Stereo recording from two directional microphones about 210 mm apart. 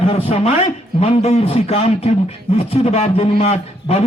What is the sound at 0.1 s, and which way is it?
A man's voice, 30° left (ahead or behind).